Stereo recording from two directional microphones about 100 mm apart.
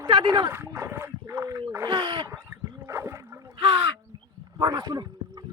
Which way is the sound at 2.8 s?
30° right (ahead or behind).